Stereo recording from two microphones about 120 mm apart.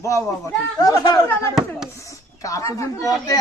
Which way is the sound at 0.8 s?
35° left (ahead or behind).